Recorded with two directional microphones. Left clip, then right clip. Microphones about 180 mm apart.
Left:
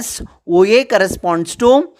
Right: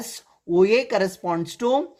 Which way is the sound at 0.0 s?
40° left (ahead or behind).